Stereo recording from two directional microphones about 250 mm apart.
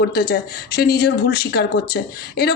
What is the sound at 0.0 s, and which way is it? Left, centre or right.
Speech, left.